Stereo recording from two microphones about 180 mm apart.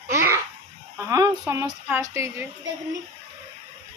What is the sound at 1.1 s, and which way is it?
Speech, 20° right (ahead or behind).